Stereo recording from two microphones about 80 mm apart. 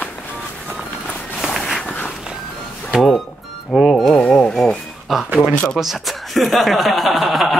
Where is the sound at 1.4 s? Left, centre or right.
Centre.